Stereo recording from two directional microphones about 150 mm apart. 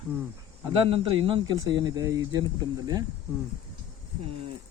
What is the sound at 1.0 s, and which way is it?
Speech, 35° right (ahead or behind).